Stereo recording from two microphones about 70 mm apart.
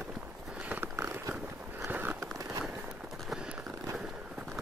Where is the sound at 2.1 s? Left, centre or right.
Right.